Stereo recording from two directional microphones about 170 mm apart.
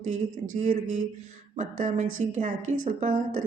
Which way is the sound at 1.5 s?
45° right (ahead or behind).